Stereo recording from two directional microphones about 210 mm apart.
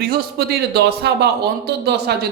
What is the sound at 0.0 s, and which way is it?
A man's voice, 50° right (ahead or behind).